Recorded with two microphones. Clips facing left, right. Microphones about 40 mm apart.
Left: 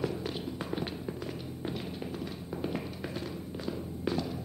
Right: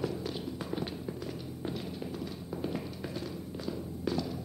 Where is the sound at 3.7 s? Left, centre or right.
Left.